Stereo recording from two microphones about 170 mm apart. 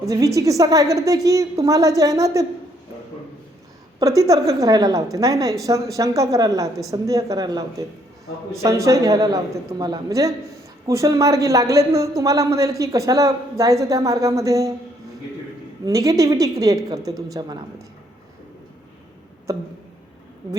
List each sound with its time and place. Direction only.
0.0 s a man's voice: 20° right (ahead or behind)
4.0 s a man's voice: 20° right (ahead or behind)
15.8 s a man's voice: 20° right (ahead or behind)